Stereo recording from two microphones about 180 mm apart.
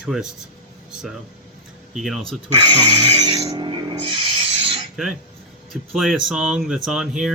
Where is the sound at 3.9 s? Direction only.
30° right (ahead or behind).